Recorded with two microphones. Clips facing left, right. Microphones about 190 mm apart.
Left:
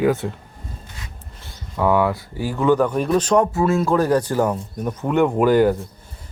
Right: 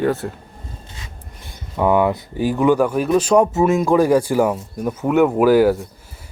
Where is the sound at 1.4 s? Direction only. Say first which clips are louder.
Right 2 dB; 15° right (ahead or behind).